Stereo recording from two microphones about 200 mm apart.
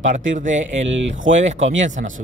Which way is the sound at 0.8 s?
70° right (ahead or behind).